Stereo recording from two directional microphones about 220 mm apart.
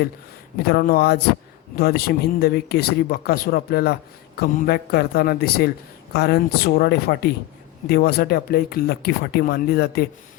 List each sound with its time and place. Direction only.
0.7 s speech: 45° left (ahead or behind)